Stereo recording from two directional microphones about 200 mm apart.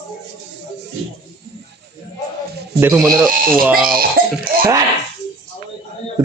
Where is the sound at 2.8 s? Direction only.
10° right (ahead or behind).